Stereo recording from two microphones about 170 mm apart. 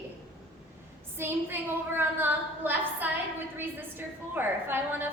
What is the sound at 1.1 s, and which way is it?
A woman's voice, 15° right (ahead or behind).